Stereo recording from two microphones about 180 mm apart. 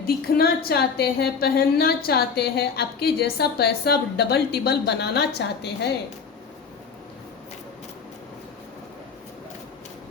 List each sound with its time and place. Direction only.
0.0 s a woman's voice: 55° left (ahead or behind)